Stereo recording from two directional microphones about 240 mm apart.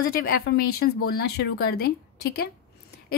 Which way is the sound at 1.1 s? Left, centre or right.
Left.